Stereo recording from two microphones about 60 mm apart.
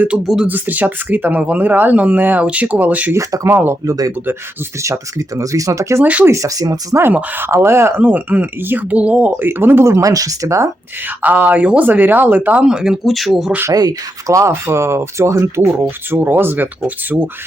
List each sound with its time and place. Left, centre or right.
0.4 s speech: right
3.4 s speech: right
3.8 s speech: right
4.8 s speech: right
7.1 s speech: right
7.4 s speech: right
8.0 s speech: right
9.5 s speech: right
10.0 s speech: right
11.0 s speech: right
11.9 s speech: right
12.6 s speech: centre
13.1 s speech: centre
13.7 s speech: right